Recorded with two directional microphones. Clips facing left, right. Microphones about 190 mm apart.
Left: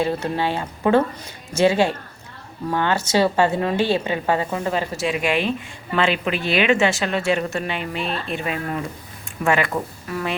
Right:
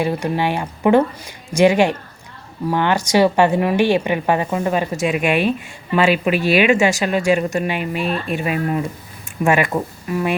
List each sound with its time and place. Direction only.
0.0 s a woman's voice: 15° right (ahead or behind)